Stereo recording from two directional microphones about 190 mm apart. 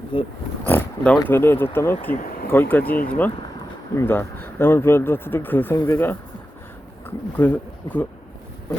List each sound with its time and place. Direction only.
0.1 s speech: 25° left (ahead or behind)
0.7 s speech: 10° left (ahead or behind)
2.1 s a sound: 45° left (ahead or behind)
2.5 s speech: 10° left (ahead or behind)
7.3 s speech: 10° left (ahead or behind)